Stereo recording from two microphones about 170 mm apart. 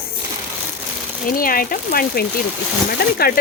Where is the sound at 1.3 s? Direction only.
60° left (ahead or behind).